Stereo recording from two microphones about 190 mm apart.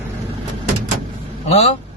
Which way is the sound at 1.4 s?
35° left (ahead or behind).